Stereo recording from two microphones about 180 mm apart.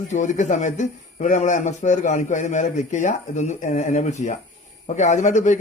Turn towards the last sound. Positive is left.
turn(degrees=40)  # may be behind; listen again after turning